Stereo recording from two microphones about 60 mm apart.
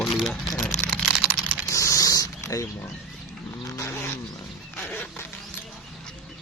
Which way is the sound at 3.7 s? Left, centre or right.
Left.